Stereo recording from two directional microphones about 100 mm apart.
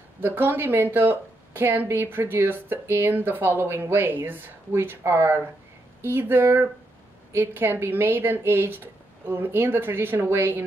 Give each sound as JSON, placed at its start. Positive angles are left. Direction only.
{"t": 0.2, "sound": "a woman's voice", "side_deg": -20}